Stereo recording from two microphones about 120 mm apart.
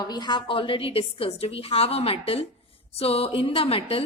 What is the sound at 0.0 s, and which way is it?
A woman's voice, 35° left (ahead or behind).